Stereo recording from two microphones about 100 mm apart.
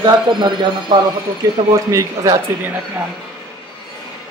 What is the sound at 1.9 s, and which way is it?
Speech, 35° right (ahead or behind).